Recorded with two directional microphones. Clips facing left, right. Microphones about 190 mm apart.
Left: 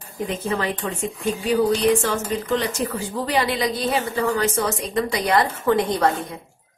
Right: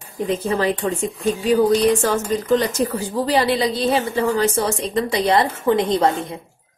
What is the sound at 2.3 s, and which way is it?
A woman's voice, 40° right (ahead or behind).